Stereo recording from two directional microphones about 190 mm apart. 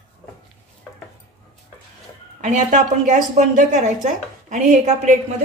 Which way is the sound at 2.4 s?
40° right (ahead or behind).